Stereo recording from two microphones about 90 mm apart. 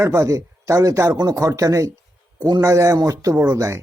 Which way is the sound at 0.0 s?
35° right (ahead or behind).